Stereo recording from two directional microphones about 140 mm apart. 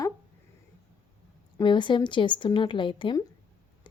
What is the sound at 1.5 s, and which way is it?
Speech, 35° left (ahead or behind).